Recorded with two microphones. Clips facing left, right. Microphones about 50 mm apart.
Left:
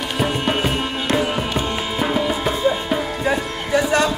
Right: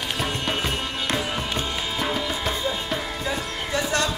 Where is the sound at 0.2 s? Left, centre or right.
Centre.